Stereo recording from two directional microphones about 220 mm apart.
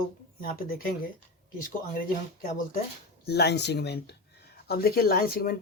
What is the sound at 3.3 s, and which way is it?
Speech, 50° left (ahead or behind).